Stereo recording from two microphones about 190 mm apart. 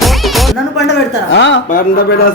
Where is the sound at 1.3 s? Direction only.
70° left (ahead or behind).